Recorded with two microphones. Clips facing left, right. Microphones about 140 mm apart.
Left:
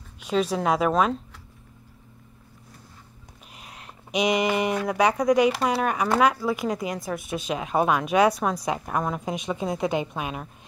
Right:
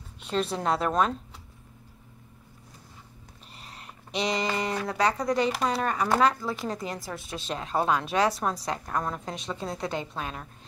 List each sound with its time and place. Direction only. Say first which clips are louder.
0.3 s speech: left 4 dB; 5° left (ahead or behind)
3.5 s a sound: left 2 dB; 5° left (ahead or behind)
4.1 s speech: left 6 dB; 15° left (ahead or behind)